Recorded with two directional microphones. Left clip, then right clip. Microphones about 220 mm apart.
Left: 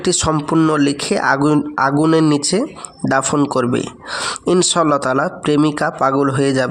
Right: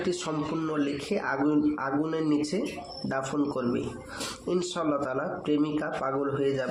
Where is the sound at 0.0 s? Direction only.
45° left (ahead or behind).